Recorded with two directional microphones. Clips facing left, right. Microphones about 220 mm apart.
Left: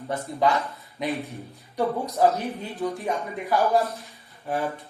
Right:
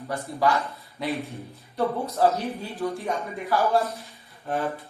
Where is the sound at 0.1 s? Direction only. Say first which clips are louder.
Left 1 dB; 20° left (ahead or behind).